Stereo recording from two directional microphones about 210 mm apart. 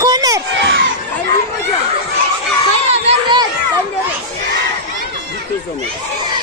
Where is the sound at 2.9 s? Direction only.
30° right (ahead or behind).